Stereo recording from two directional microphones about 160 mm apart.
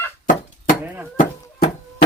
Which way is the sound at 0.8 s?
10° right (ahead or behind).